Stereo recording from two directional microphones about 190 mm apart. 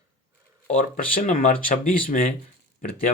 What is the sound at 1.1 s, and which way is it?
Speech, 45° left (ahead or behind).